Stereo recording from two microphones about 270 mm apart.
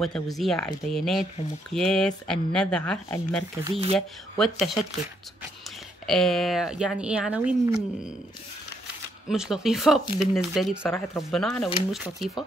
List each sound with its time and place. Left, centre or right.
0.0 s speech: centre
3.6 s speech: right
4.4 s speech: centre
6.0 s speech: centre
9.3 s speech: centre